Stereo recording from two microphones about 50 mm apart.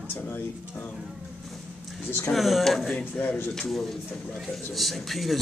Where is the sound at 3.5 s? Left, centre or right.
Centre.